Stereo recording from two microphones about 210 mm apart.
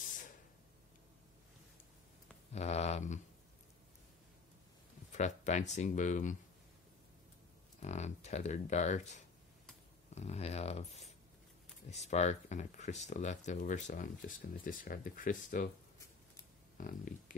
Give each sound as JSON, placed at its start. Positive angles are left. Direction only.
{"t": 2.5, "sound": "speech", "side_deg": 30}
{"t": 5.1, "sound": "speech", "side_deg": 35}
{"t": 7.8, "sound": "speech", "side_deg": 35}
{"t": 16.7, "sound": "speech", "side_deg": 40}